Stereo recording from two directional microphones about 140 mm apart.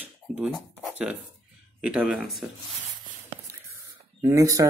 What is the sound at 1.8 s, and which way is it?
Speech, 5° right (ahead or behind).